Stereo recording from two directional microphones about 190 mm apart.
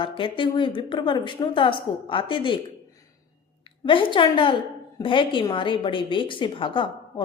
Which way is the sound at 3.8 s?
25° left (ahead or behind).